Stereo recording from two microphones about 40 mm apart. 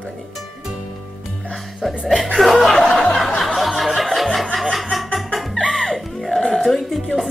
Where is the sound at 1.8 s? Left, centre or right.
Centre.